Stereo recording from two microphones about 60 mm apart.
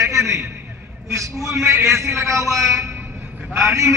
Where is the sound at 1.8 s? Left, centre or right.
Right.